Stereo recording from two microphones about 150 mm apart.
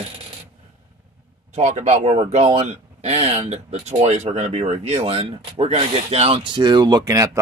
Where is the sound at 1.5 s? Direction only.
50° right (ahead or behind).